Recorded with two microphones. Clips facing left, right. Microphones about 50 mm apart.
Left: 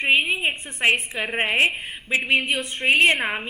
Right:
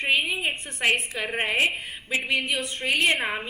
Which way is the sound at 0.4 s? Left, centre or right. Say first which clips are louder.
Left 3 dB; left.